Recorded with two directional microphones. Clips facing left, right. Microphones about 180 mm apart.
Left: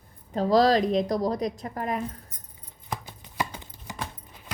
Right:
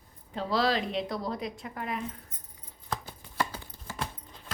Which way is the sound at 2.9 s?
15° left (ahead or behind).